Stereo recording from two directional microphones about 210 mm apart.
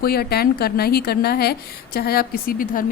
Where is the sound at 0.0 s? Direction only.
50° left (ahead or behind).